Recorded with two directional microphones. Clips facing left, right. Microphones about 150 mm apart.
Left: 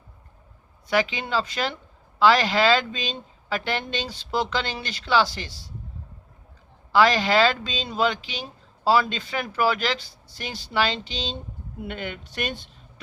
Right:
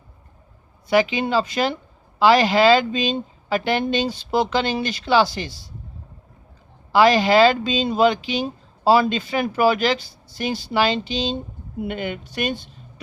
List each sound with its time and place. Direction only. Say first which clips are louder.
0.9 s a woman's voice: right 6 dB; 10° right (ahead or behind)
6.9 s a woman's voice: right 4 dB; 10° right (ahead or behind)